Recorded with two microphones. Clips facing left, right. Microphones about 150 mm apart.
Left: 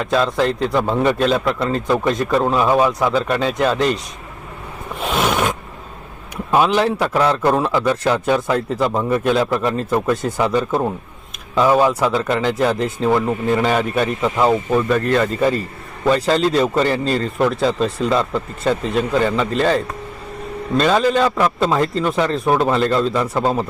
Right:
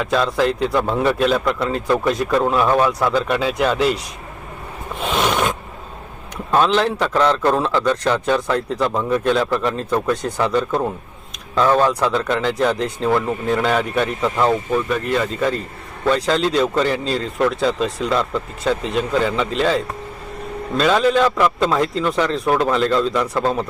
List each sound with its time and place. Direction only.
0.0 s a man's voice: centre (ahead or behind)
4.9 s roar: centre (ahead or behind)
6.3 s a man's voice: 10° left (ahead or behind)
20.7 s a man's voice: centre (ahead or behind)
23.0 s a man's voice: 30° left (ahead or behind)